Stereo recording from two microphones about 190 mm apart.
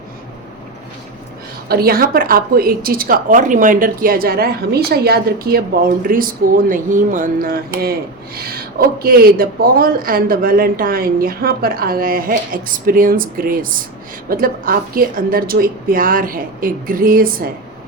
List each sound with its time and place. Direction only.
1.6 s a woman's voice: 55° right (ahead or behind)